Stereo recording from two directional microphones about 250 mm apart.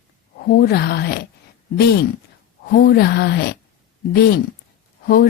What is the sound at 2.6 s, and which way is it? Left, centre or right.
Speech, left.